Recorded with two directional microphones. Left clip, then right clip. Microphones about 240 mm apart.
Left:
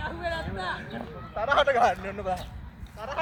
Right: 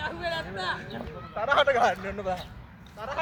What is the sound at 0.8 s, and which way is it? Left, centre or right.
Speech, centre.